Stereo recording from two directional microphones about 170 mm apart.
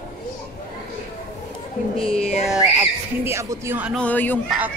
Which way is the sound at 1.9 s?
35° left (ahead or behind).